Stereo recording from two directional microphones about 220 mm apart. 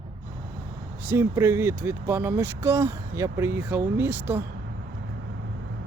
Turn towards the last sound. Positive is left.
turn(degrees=-10)  # may be behind; listen again after turning